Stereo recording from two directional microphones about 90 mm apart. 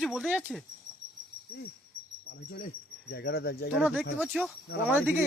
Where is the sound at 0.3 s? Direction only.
10° right (ahead or behind).